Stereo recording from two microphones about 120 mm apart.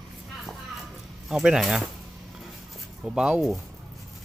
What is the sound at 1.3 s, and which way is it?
Speech, 5° right (ahead or behind).